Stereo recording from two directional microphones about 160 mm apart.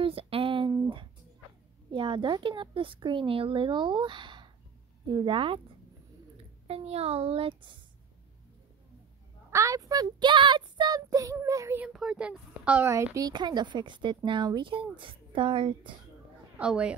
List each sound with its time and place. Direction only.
0.0 s a sound: 35° right (ahead or behind)
1.9 s a woman's voice: 30° right (ahead or behind)
6.7 s a woman's voice: 40° right (ahead or behind)
9.5 s speech: 20° right (ahead or behind)
11.8 s a woman's voice: 5° right (ahead or behind); by 15.9 s 30° right (ahead or behind)
16.5 s a woman's voice: 5° right (ahead or behind)